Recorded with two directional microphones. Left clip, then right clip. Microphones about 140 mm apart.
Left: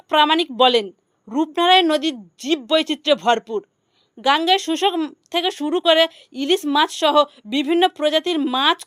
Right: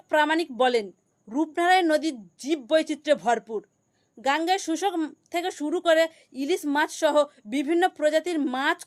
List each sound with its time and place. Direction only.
0.1 s speech: 25° left (ahead or behind)